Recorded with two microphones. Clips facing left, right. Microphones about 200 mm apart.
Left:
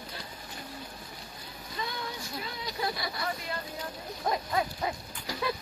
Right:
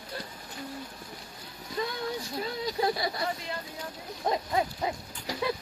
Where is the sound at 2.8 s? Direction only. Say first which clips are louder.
Right 5 dB; 35° right (ahead or behind).